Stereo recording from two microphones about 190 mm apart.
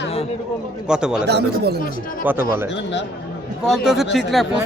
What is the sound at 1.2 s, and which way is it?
Speech, 60° right (ahead or behind).